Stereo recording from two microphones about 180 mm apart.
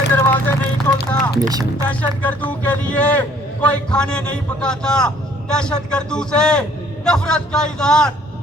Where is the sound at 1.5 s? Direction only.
20° right (ahead or behind).